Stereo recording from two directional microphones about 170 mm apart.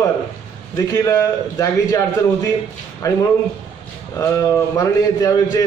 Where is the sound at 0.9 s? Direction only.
20° left (ahead or behind).